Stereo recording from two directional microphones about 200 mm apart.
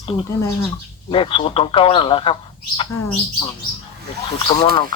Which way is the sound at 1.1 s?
25° left (ahead or behind).